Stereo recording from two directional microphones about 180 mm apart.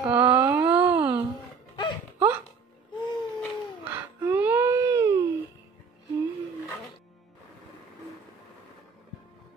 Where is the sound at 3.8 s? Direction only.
10° right (ahead or behind).